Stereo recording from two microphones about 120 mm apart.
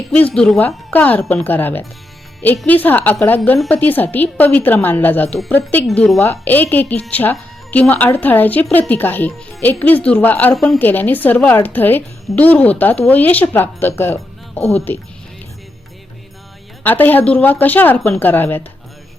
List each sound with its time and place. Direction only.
0.3 s speech: 5° left (ahead or behind)
16.8 s speech: 15° left (ahead or behind)